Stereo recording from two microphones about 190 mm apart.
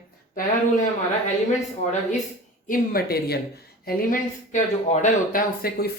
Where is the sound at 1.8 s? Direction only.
40° left (ahead or behind).